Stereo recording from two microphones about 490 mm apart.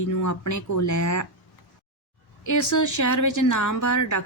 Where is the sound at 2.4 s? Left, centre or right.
Left.